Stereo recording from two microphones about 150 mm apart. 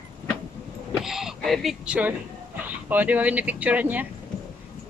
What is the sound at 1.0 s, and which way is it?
Speech, 5° right (ahead or behind).